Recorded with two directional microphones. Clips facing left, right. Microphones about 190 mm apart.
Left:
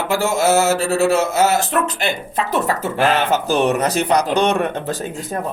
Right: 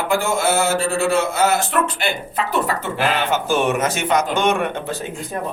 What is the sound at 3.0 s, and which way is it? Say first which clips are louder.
A man's voice: left 4 dB; 40° left (ahead or behind).